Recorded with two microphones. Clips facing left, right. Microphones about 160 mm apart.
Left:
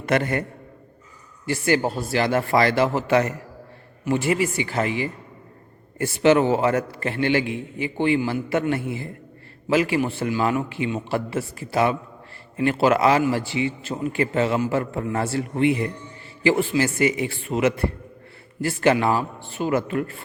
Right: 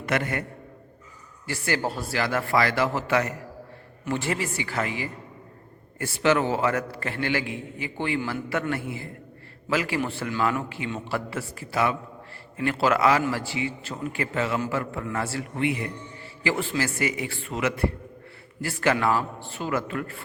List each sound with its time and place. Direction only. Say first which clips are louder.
0.1 s a man's voice: left 5 dB; 30° left (ahead or behind)
1.5 s a man's voice: left 6 dB; 20° left (ahead or behind)
4.0 s a man's voice: left 6 dB; 15° left (ahead or behind)